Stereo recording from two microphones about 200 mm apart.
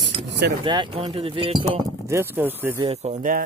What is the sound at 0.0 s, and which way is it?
Mechanisms, 60° right (ahead or behind).